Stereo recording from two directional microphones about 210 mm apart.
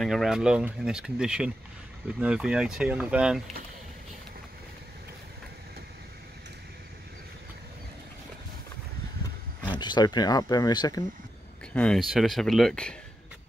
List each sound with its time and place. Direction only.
0.0 s speech: centre (ahead or behind)
9.8 s speech: 20° left (ahead or behind)
11.7 s speech: 5° left (ahead or behind)